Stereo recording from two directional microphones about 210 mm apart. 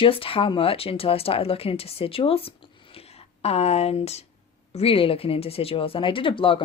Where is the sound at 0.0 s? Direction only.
25° left (ahead or behind).